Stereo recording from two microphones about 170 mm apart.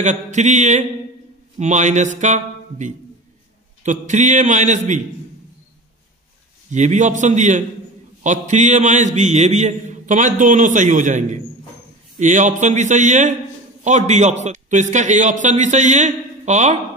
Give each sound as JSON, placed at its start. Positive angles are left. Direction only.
{"t": 0.0, "sound": "a man's voice", "side_deg": -45}
{"t": 6.7, "sound": "a man's voice", "side_deg": -45}